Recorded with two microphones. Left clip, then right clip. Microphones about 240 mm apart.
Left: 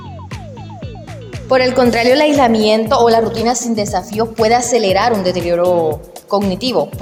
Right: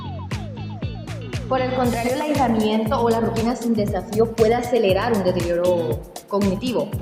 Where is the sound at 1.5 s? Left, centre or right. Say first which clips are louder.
Left 9 dB; left.